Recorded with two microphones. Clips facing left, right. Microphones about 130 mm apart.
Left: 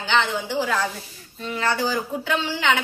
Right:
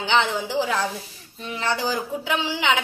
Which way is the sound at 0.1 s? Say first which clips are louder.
Even; 20° right (ahead or behind).